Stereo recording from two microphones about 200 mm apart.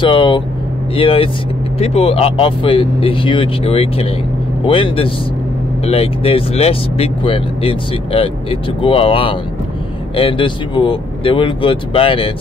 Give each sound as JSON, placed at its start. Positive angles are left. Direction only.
{"t": 0.0, "sound": "speech", "side_deg": 25}